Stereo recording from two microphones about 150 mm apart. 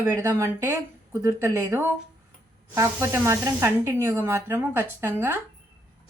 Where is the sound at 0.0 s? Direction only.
20° right (ahead or behind).